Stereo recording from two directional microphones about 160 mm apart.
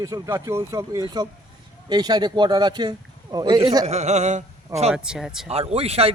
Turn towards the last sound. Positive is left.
turn(degrees=-40)  # may be behind; listen again after turning